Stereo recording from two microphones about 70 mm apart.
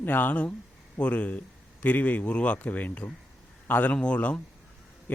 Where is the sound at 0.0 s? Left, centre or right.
Left.